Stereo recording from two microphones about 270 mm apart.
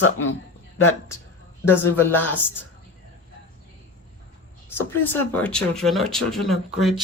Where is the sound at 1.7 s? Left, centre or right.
Centre.